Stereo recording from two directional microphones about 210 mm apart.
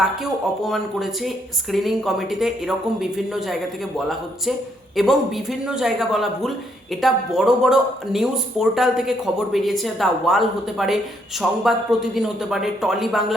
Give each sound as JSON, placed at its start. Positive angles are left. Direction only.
{"t": 0.0, "sound": "a man's voice", "side_deg": 0}